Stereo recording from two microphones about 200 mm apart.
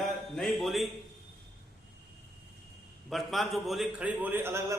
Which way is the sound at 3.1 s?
Centre (ahead or behind).